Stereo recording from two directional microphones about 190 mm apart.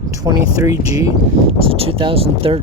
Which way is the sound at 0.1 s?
20° right (ahead or behind).